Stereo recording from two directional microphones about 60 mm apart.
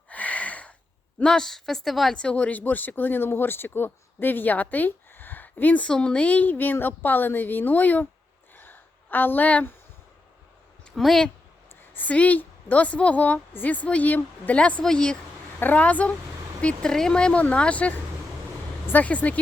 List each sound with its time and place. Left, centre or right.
0.1 s a sound: left
1.2 s a woman's voice: centre
2.1 s speech: centre
5.9 s speech: centre
8.5 s a sound: left
10.9 s a woman's voice: centre
11.9 s a woman's voice: left
15.6 s a woman's voice: left